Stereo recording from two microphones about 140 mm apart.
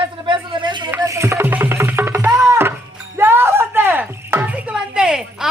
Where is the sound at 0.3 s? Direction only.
35° right (ahead or behind).